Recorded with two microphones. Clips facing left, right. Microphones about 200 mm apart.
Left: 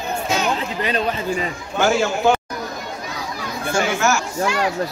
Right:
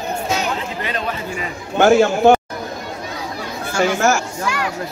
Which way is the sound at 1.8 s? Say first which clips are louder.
Right 6 dB; 55° right (ahead or behind).